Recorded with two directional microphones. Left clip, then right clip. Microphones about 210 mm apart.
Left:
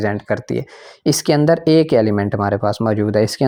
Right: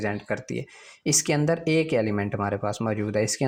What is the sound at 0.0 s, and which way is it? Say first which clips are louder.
Speech: left 9 dB; 35° left (ahead or behind).